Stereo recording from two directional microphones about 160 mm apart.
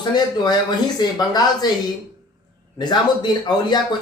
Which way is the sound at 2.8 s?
25° left (ahead or behind).